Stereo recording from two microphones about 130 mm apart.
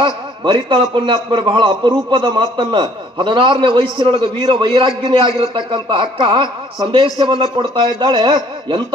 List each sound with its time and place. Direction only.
0.0 s a man's voice: 40° right (ahead or behind)